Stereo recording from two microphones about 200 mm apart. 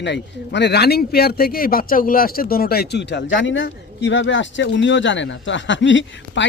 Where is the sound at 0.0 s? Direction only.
60° left (ahead or behind).